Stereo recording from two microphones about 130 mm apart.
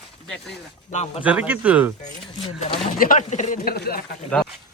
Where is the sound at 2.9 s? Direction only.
90° left; by 3.6 s 70° left (ahead or behind).